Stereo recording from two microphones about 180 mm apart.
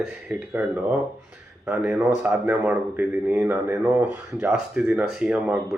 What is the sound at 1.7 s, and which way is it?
A man's voice, 10° right (ahead or behind).